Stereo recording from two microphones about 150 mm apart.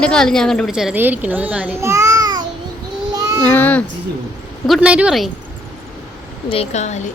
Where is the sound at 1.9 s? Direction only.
20° right (ahead or behind).